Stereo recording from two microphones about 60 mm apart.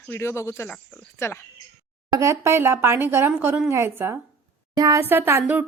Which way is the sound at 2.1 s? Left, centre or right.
Right.